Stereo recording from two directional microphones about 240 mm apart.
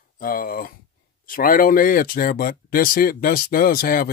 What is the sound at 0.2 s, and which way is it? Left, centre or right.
Speech, left.